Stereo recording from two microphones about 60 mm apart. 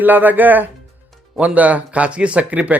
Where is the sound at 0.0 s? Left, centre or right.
Right.